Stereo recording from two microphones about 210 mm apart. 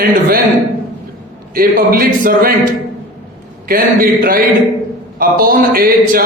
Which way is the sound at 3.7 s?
45° right (ahead or behind).